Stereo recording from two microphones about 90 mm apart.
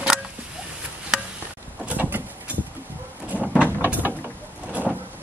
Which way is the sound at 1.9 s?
20° right (ahead or behind).